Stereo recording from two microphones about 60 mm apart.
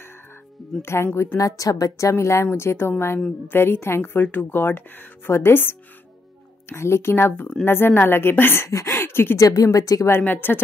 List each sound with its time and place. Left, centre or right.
0.8 s speech: left
1.3 s a woman's voice: left
8.6 s speech: left
9.4 s speech: left
10.2 s a woman's voice: left